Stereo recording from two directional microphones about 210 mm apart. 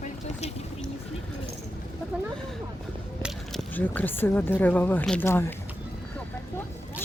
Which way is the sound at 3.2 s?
Centre (ahead or behind).